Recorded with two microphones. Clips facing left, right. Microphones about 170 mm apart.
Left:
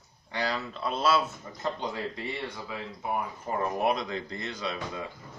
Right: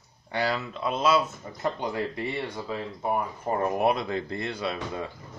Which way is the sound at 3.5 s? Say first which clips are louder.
Right 4 dB; 40° right (ahead or behind).